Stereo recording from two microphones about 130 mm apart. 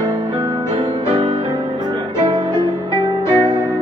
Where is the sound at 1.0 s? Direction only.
35° right (ahead or behind).